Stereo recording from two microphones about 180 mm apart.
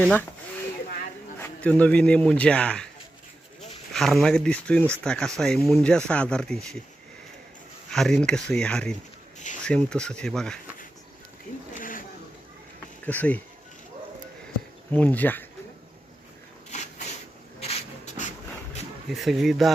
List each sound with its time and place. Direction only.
0.0 s speech: 10° left (ahead or behind)
1.4 s speech: 5° left (ahead or behind)
3.9 s speech: centre (ahead or behind)
7.9 s speech: centre (ahead or behind)
11.8 s a sound: 50° left (ahead or behind)
13.1 s speech: 10° left (ahead or behind)
14.9 s speech: 10° left (ahead or behind)
16.6 s a sound: 40° left (ahead or behind)
19.1 s speech: centre (ahead or behind)